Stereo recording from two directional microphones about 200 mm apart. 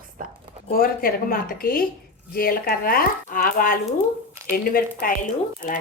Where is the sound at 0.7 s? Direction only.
45° left (ahead or behind).